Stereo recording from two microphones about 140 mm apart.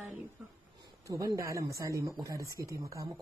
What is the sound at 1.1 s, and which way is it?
Speech, 25° right (ahead or behind).